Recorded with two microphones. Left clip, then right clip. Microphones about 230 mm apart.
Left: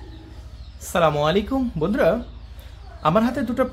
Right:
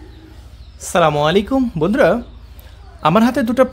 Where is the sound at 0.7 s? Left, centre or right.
Right.